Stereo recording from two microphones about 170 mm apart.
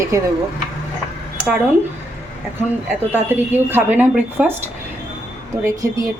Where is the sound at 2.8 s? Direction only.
10° right (ahead or behind).